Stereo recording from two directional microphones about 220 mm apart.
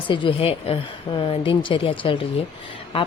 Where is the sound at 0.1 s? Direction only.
25° left (ahead or behind).